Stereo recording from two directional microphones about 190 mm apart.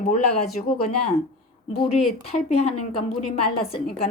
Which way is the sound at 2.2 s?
35° left (ahead or behind).